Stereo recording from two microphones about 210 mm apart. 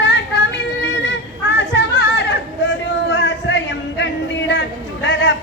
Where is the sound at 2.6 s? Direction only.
60° left (ahead or behind).